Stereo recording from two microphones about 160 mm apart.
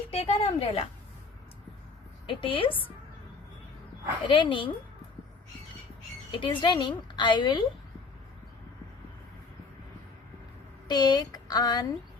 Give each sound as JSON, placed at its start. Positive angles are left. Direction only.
{"t": 0.1, "sound": "a woman's voice", "side_deg": 40}
{"t": 2.2, "sound": "a woman's voice", "side_deg": 35}
{"t": 4.3, "sound": "a woman's voice", "side_deg": 30}
{"t": 6.3, "sound": "a woman's voice", "side_deg": 30}
{"t": 10.8, "sound": "speech", "side_deg": 25}